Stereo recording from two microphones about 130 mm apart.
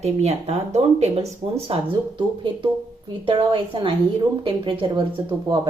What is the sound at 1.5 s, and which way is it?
A woman's voice, 45° right (ahead or behind).